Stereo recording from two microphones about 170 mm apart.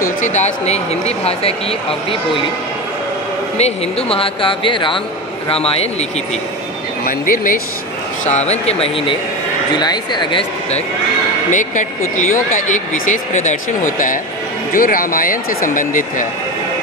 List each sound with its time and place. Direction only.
0.2 s speech: 45° left (ahead or behind)
3.5 s speech: 40° left (ahead or behind)
7.1 s speech: 55° left (ahead or behind)
8.3 s speech: 40° left (ahead or behind)
11.5 s speech: 45° left (ahead or behind)